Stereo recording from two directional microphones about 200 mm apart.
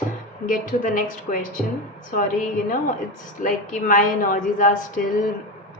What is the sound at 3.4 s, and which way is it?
A woman's voice, 40° left (ahead or behind).